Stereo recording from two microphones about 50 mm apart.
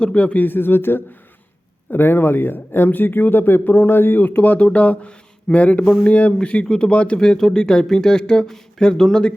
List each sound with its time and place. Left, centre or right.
0.0 s speech: left
0.3 s speech: left
7.2 s speech: centre